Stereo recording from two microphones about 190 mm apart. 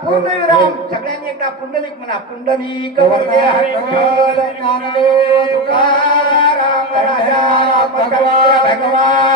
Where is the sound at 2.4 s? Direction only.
25° left (ahead or behind).